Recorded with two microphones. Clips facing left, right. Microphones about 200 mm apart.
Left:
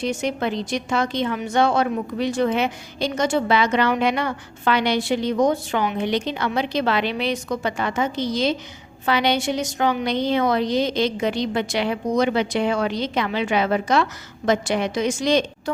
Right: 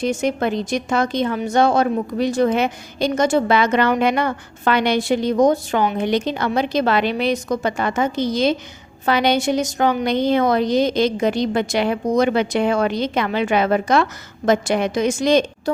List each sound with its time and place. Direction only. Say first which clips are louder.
0.0 s a woman's voice: right 4 dB; 50° right (ahead or behind)